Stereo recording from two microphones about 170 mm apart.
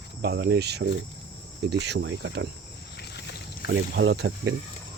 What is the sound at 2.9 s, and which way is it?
Rowboat, 75° left (ahead or behind).